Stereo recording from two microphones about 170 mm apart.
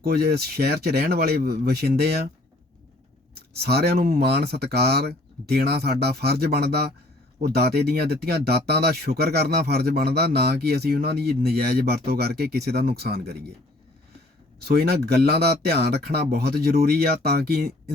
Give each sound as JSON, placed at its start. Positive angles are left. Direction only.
{"t": 0.0, "sound": "speech", "side_deg": -70}
{"t": 3.3, "sound": "speech", "side_deg": -70}
{"t": 14.6, "sound": "speech", "side_deg": -70}